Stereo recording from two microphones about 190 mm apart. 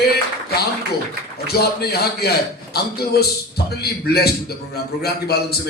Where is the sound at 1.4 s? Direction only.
55° left (ahead or behind).